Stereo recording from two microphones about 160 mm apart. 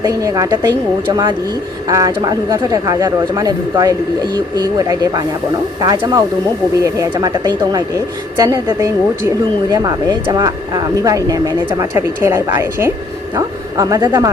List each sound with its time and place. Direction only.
0.0 s a woman's voice: 20° right (ahead or behind)